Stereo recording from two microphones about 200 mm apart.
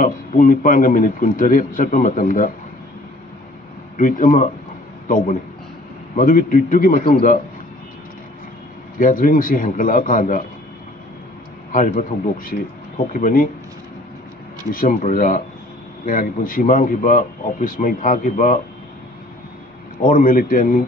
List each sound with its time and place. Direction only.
0.0 s a man's voice: 45° left (ahead or behind)
4.0 s a man's voice: 40° left (ahead or behind)
8.9 s a man's voice: 45° left (ahead or behind)
11.7 s a man's voice: 40° left (ahead or behind)
14.7 s a man's voice: 45° left (ahead or behind)
20.0 s a man's voice: 45° left (ahead or behind)